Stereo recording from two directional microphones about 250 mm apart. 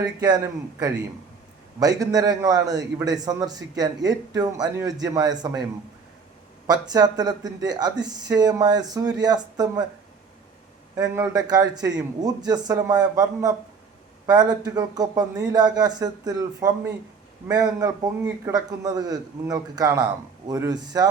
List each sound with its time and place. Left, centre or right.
0.0 s speech: centre
6.7 s speech: centre
10.9 s speech: centre